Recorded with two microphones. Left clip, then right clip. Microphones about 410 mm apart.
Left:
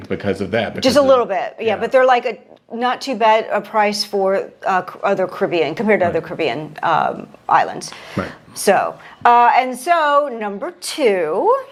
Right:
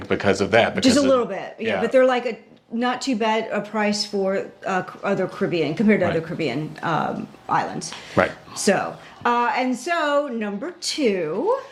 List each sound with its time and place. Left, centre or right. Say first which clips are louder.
0.1 s speech: right 2 dB; right
0.8 s speech: left 5 dB; left